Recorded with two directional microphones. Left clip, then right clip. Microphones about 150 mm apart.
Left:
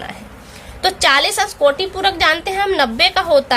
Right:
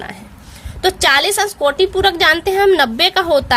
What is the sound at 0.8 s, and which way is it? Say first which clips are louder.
A woman's voice: right 1 dB; 45° right (ahead or behind).